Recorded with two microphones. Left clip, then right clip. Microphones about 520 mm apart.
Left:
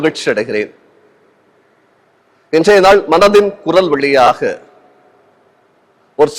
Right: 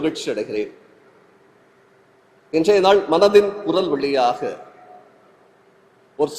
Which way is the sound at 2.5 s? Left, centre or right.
Left.